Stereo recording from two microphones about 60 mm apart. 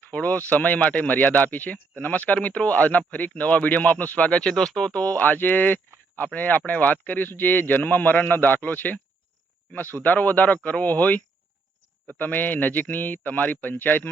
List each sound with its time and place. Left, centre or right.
0.1 s speech: left; by 4.9 s centre
4.9 s speech: left